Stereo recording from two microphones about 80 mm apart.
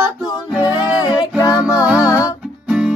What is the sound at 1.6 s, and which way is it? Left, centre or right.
Music, left.